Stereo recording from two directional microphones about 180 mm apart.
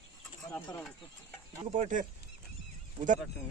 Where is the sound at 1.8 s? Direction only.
45° right (ahead or behind).